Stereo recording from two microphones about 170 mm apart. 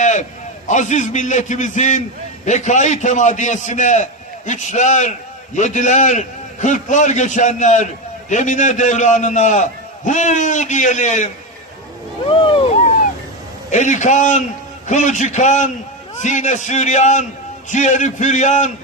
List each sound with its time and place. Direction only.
0.0 s a sound: 45° left (ahead or behind)
0.7 s a man's voice: 45° left (ahead or behind)
12.2 s speech: 30° left (ahead or behind)
13.7 s a man's voice: 45° left (ahead or behind)